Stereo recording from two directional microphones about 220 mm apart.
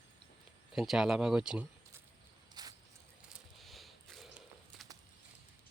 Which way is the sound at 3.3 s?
Centre (ahead or behind).